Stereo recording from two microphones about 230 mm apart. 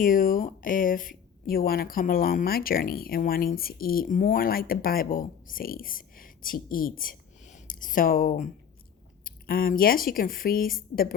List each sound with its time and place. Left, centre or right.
0.0 s speech: left